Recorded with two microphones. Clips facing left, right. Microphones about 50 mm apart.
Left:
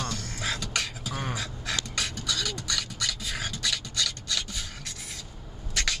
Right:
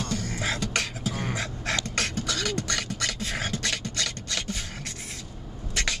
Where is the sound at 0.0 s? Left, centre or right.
Centre.